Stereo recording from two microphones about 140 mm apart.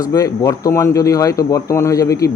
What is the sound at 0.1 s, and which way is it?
Speech, 25° left (ahead or behind).